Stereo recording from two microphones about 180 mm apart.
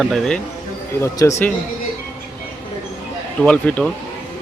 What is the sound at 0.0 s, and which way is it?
Speech, centre (ahead or behind).